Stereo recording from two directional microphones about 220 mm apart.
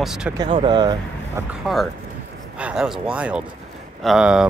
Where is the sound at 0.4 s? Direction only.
20° right (ahead or behind).